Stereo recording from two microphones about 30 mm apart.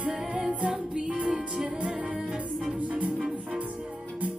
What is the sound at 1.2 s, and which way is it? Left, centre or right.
Music, right.